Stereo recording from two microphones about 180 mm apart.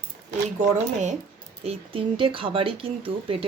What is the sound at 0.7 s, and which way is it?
Speech, 40° right (ahead or behind).